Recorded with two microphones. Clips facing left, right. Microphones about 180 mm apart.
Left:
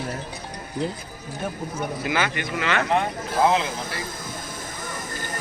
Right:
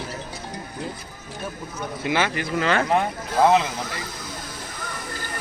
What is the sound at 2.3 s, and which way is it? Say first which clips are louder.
Speech: right 3 dB; 35° right (ahead or behind).